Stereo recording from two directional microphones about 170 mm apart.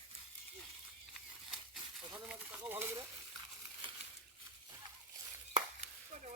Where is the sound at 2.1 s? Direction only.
10° right (ahead or behind).